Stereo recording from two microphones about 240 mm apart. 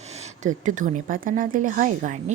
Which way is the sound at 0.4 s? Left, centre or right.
Right.